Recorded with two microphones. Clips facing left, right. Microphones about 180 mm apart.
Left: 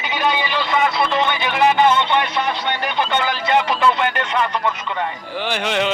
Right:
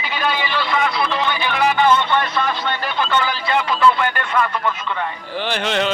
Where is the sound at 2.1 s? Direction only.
15° left (ahead or behind).